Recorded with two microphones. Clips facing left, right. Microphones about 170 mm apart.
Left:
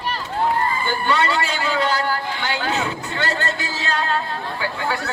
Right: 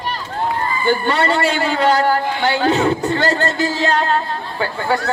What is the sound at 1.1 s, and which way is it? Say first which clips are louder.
Speech: right 4 dB; 40° right (ahead or behind).